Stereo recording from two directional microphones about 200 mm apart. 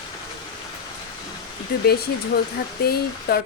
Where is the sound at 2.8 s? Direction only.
50° left (ahead or behind).